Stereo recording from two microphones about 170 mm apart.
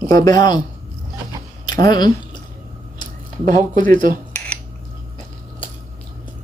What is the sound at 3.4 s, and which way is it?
Speech, 50° right (ahead or behind).